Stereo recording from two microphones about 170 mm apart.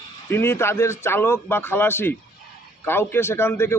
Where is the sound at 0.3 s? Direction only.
15° left (ahead or behind).